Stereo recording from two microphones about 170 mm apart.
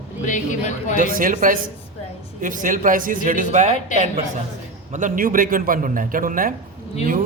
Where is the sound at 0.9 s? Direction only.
55° right (ahead or behind).